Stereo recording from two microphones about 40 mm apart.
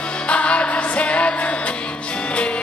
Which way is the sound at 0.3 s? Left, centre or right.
Left.